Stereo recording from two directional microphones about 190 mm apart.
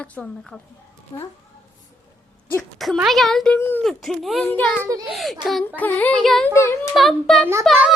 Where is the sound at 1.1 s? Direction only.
25° left (ahead or behind).